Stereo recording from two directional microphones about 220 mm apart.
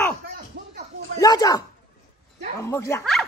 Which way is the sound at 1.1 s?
15° left (ahead or behind).